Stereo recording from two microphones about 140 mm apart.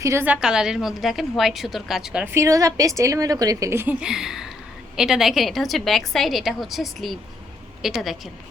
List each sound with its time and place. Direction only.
0.0 s a woman's voice: 20° right (ahead or behind)
0.3 s a woman's voice: 5° right (ahead or behind)
2.3 s a woman's voice: 20° right (ahead or behind)
4.0 s a woman's voice: 5° right (ahead or behind)